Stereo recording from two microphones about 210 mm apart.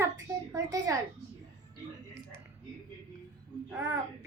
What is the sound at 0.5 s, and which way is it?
Speech, 15° right (ahead or behind).